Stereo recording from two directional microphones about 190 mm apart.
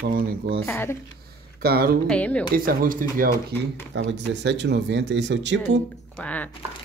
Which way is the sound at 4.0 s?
65° right (ahead or behind).